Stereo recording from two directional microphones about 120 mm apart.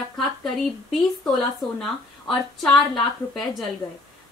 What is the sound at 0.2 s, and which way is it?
A woman's voice, 5° left (ahead or behind).